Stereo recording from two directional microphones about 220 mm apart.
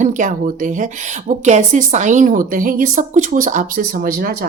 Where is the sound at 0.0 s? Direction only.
35° right (ahead or behind).